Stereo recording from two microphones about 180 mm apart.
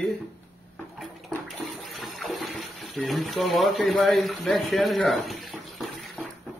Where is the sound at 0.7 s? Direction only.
Centre (ahead or behind).